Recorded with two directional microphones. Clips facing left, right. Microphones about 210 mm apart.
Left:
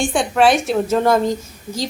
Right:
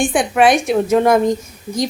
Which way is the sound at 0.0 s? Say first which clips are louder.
Right 2 dB; 15° right (ahead or behind).